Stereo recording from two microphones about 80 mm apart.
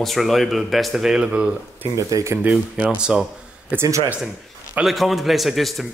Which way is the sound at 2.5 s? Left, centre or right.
Centre.